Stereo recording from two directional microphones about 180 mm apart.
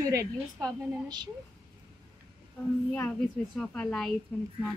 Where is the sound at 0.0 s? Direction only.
20° right (ahead or behind).